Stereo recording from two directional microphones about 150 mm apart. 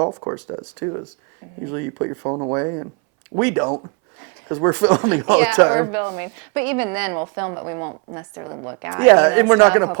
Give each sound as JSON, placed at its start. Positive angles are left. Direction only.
{"t": 0.0, "sound": "speech", "side_deg": -25}